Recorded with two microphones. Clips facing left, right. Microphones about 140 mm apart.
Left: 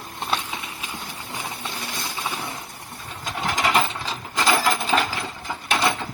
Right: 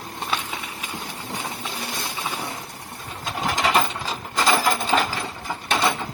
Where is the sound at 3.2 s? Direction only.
Centre (ahead or behind).